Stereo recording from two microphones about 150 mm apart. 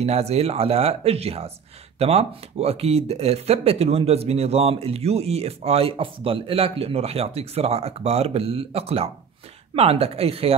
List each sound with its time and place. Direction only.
0.0 s speech: 45° right (ahead or behind)